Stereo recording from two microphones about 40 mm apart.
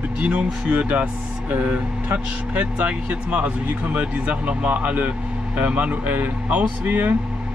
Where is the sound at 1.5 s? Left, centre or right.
Right.